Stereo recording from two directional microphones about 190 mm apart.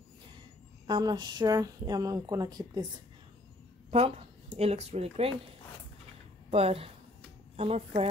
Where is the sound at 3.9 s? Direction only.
35° right (ahead or behind).